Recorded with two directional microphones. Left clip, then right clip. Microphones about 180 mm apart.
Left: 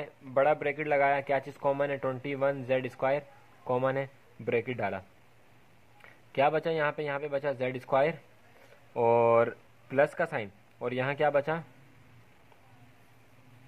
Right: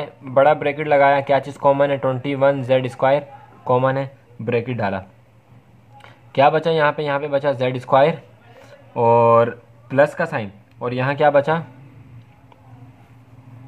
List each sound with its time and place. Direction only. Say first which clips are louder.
0.0 s speech: right 12 dB; 20° left (ahead or behind)
6.0 s speech: right 12 dB; 25° left (ahead or behind)
8.9 s speech: right 10 dB; 35° left (ahead or behind); by 11.6 s 20° left (ahead or behind)